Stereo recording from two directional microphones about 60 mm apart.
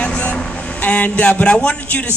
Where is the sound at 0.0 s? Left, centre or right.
Centre.